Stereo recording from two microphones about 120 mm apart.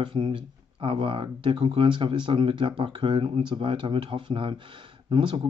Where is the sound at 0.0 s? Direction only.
45° right (ahead or behind).